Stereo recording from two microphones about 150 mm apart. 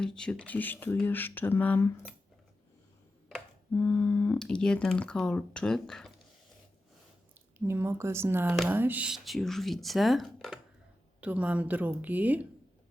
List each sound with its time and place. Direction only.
0.0 s speech: 5° left (ahead or behind)
3.7 s speech: 15° left (ahead or behind)
7.6 s speech: 15° right (ahead or behind)